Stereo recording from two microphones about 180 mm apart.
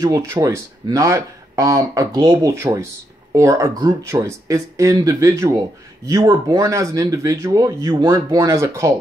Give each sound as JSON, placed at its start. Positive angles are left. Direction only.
{"t": 0.0, "sound": "speech", "side_deg": -20}